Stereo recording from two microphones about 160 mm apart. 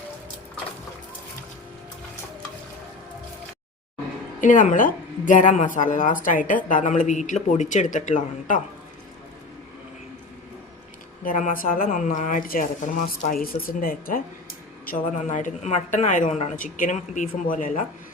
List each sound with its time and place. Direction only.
4.4 s a woman's voice: 50° left (ahead or behind)
11.2 s speech: 55° left (ahead or behind)
14.8 s a woman's voice: 55° left (ahead or behind)